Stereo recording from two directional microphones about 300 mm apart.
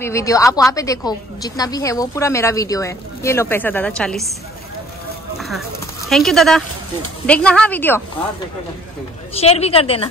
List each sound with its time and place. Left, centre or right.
0.0 s a woman's voice: centre
6.0 s speech: centre
9.3 s speech: centre